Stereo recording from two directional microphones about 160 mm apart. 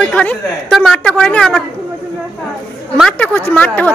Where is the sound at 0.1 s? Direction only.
5° left (ahead or behind).